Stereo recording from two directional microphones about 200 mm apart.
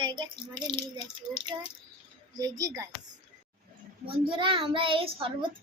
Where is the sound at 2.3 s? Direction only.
20° right (ahead or behind).